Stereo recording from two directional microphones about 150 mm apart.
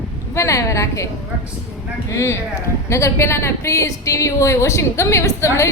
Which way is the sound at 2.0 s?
20° left (ahead or behind).